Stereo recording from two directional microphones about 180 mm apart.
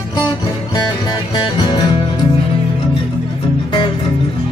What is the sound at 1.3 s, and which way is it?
Music, 25° left (ahead or behind).